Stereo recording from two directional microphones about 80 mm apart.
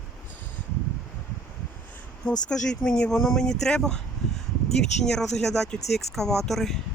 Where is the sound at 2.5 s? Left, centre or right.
Centre.